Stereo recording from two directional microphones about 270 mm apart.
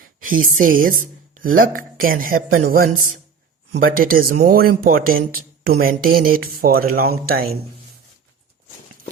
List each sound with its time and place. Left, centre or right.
0.3 s speech: right